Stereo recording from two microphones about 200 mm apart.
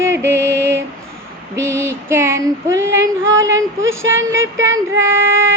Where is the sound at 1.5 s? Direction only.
15° right (ahead or behind).